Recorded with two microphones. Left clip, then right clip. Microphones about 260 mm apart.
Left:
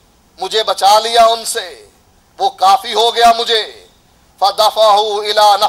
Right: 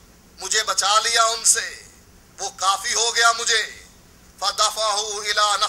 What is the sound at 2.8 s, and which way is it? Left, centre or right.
Speech, left.